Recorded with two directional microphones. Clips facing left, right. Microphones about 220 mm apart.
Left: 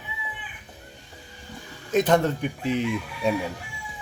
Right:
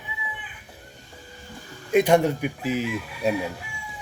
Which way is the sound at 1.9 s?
10° right (ahead or behind).